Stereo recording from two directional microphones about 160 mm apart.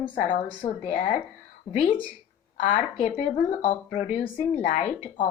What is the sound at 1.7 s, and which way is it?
Speech, 35° left (ahead or behind).